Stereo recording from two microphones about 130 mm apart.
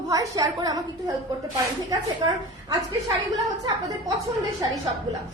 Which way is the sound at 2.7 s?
30° right (ahead or behind).